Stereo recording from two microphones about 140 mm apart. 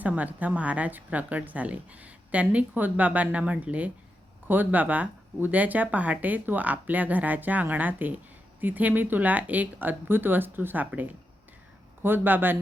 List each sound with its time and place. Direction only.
0.0 s a woman's voice: 10° right (ahead or behind)